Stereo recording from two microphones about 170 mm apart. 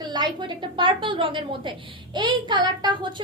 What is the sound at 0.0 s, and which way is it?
A child's voice, 25° right (ahead or behind).